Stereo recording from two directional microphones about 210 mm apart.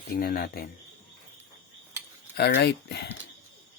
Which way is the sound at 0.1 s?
45° left (ahead or behind).